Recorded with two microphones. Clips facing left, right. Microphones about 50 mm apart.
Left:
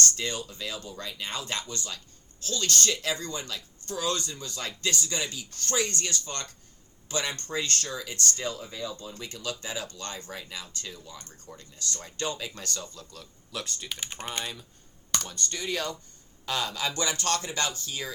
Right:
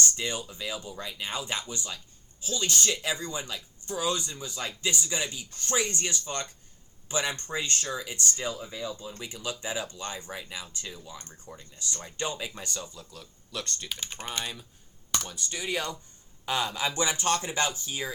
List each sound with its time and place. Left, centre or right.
0.2 s speech: centre